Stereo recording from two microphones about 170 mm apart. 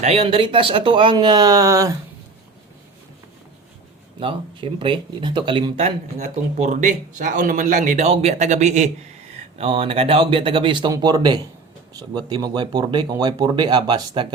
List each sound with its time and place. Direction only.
0.0 s speech: 35° right (ahead or behind); by 2.0 s 20° right (ahead or behind)
4.2 s speech: 30° right (ahead or behind)